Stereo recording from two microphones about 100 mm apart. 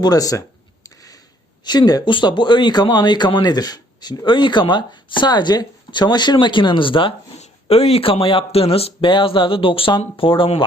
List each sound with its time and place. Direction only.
0.0 s speech: 40° left (ahead or behind)
1.6 s speech: 45° left (ahead or behind)
2.0 s a man's voice: 55° left (ahead or behind)